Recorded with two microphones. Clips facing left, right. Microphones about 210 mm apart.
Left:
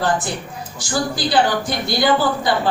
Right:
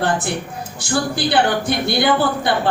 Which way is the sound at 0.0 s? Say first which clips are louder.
Right 1 dB; 60° right (ahead or behind).